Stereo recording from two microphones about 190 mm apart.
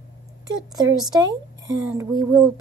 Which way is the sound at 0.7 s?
20° right (ahead or behind).